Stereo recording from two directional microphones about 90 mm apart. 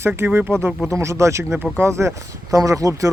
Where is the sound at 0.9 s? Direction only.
30° right (ahead or behind).